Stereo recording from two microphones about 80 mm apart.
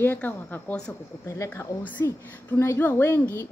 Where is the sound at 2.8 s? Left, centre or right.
Left.